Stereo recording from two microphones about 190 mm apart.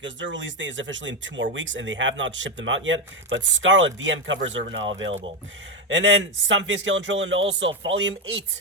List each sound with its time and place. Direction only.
0.0 s speech: 75° right (ahead or behind)